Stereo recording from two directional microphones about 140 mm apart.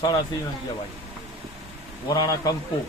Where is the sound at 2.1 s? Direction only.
30° left (ahead or behind).